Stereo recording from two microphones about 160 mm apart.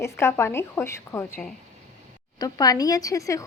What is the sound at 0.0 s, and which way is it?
A woman's voice, 15° left (ahead or behind).